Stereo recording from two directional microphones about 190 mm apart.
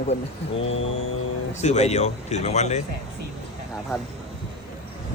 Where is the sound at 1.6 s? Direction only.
35° left (ahead or behind).